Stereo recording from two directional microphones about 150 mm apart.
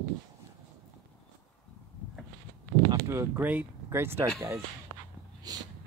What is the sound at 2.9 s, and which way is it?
Speech, 20° right (ahead or behind).